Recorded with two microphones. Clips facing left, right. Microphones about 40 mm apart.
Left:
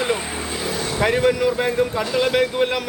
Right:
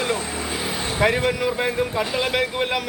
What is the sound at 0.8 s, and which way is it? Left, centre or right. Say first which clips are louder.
Vehicle: left 2 dB; right.